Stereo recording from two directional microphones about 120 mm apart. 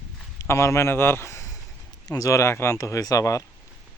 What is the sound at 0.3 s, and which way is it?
A man's voice, 25° left (ahead or behind).